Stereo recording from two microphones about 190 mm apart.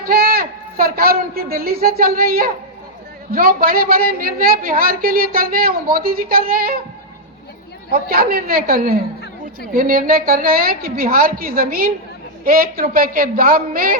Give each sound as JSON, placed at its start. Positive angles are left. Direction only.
{"t": 0.0, "sound": "a woman's voice", "side_deg": -50}
{"t": 7.9, "sound": "a woman's voice", "side_deg": -50}